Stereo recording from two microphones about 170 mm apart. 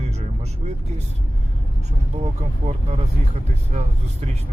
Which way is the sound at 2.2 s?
40° right (ahead or behind).